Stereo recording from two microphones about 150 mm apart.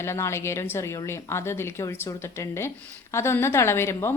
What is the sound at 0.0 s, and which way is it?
A woman's voice, 20° left (ahead or behind).